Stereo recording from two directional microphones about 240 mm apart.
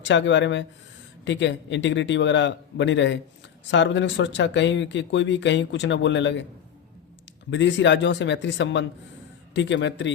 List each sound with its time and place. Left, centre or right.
0.0 s speech: left
7.5 s speech: left